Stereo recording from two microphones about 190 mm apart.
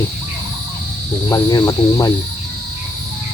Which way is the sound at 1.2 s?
20° left (ahead or behind).